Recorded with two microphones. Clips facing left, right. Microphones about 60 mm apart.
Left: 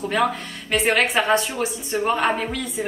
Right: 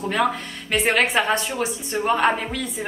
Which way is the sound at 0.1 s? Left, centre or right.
Centre.